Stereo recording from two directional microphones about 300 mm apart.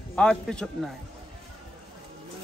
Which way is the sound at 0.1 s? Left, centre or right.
Centre.